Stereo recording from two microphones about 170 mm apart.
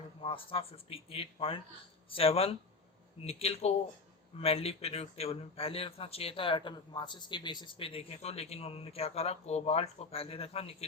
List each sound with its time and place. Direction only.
0.2 s speech: 30° left (ahead or behind)